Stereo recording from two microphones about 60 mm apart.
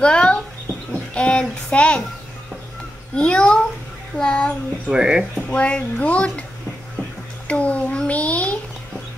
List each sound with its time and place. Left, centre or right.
0.0 s a child's voice: centre
3.2 s a child's voice: centre
4.9 s speech: centre
5.5 s a child's voice: left
7.4 s a sound: left